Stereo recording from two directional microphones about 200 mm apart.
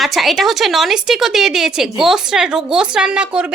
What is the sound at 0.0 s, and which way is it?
A woman's voice, centre (ahead or behind).